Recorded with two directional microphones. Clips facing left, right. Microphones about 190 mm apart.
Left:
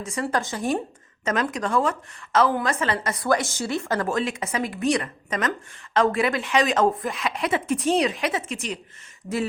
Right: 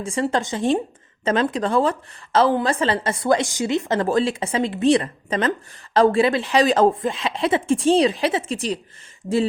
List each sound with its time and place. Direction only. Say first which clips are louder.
0.0 s a woman's voice: right 4 dB; 30° right (ahead or behind)